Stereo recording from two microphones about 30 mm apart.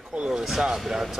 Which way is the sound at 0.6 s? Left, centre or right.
Centre.